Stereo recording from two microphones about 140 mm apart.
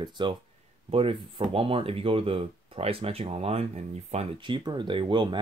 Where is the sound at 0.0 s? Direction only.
35° right (ahead or behind).